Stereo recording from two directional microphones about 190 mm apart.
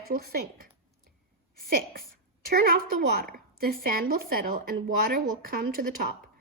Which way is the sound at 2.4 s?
50° right (ahead or behind).